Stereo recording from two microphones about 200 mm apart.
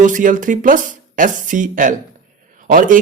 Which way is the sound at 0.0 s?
40° right (ahead or behind).